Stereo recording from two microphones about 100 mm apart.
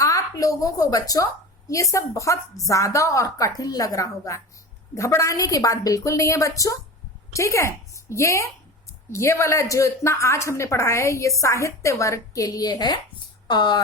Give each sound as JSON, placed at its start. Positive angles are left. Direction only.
{"t": 0.0, "sound": "a woman's voice", "side_deg": 35}